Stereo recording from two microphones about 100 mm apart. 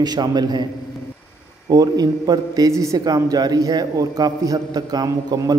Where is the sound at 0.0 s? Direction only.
45° right (ahead or behind).